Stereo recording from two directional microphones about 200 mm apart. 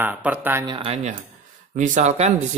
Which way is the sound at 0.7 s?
25° right (ahead or behind).